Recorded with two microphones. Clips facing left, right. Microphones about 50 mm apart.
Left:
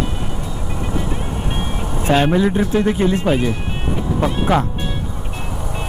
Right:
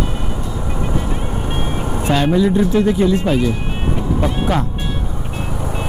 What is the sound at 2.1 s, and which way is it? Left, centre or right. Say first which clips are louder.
Speech: right 1 dB; left.